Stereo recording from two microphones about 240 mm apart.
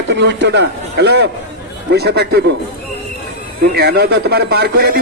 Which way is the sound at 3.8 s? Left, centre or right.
Right.